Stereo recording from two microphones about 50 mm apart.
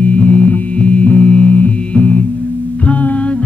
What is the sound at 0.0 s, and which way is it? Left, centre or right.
Music, left.